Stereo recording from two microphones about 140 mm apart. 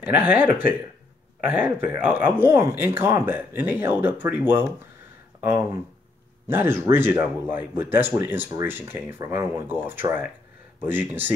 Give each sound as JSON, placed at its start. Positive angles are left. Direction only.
{"t": 0.0, "sound": "speech", "side_deg": -10}